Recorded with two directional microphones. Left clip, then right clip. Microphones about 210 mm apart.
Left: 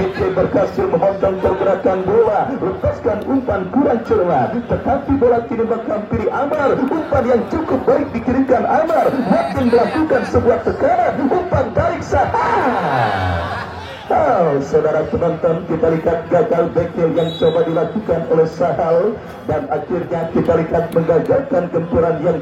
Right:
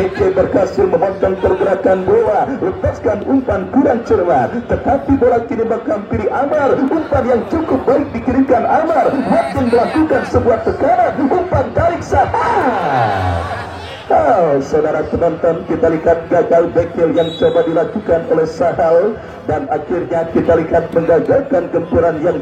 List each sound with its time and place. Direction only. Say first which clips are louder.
0.4 s speech: right 2 dB; 55° right (ahead or behind)
6.1 s a man's voice: right 3 dB; 30° right (ahead or behind)
7.1 s speech: left 1 dB; 15° right (ahead or behind)
14.1 s a man's voice: right 3 dB; 25° right (ahead or behind)
20.1 s a man's voice: right 4 dB; 40° right (ahead or behind)